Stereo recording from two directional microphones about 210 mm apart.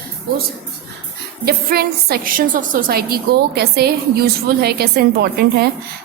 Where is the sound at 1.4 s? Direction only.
45° right (ahead or behind).